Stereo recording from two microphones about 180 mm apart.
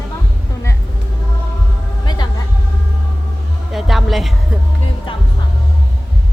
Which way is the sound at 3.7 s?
Centre (ahead or behind).